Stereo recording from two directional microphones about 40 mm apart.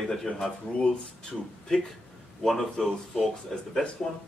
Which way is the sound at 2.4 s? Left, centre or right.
Centre.